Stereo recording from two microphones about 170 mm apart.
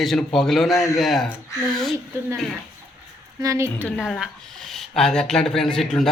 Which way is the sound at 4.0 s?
Centre (ahead or behind).